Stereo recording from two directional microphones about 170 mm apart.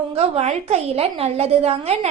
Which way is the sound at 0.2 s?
40° right (ahead or behind).